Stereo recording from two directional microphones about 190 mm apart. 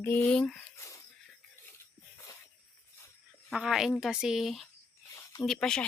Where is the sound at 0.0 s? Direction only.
10° left (ahead or behind).